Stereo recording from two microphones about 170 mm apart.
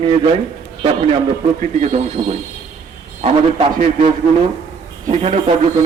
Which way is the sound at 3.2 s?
35° right (ahead or behind).